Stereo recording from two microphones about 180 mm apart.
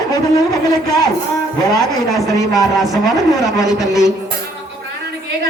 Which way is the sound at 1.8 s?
Centre (ahead or behind).